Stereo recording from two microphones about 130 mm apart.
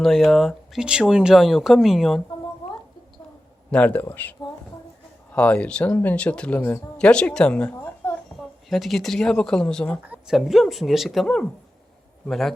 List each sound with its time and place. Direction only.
0.0 s speech: centre (ahead or behind)
3.7 s speech: 10° left (ahead or behind)
6.6 s speech: 20° left (ahead or behind)
7.0 s speech: 5° left (ahead or behind)
8.4 s speech: centre (ahead or behind)
10.0 s speech: 5° right (ahead or behind)